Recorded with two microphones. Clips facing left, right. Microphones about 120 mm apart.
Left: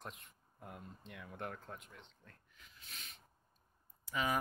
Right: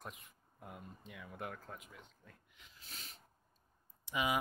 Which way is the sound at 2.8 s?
35° right (ahead or behind).